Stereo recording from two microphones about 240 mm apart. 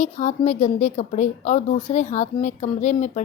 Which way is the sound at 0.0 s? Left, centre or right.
Left.